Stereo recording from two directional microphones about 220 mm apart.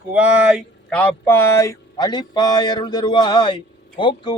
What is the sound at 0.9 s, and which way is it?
Speech, 10° left (ahead or behind).